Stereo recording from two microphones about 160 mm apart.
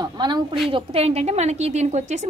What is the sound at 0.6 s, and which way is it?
Speech, 35° right (ahead or behind).